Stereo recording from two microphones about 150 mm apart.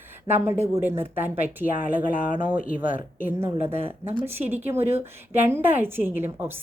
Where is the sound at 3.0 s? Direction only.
65° left (ahead or behind).